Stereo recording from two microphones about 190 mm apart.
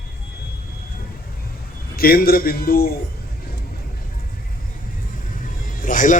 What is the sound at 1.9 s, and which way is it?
A man's voice, 50° left (ahead or behind).